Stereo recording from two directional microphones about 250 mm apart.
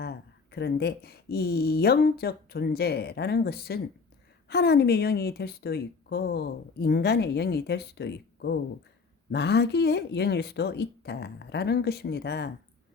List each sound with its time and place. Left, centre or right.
0.0 s a woman's voice: left